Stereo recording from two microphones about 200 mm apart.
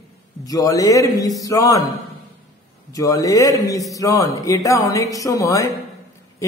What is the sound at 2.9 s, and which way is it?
A man's voice, 15° left (ahead or behind).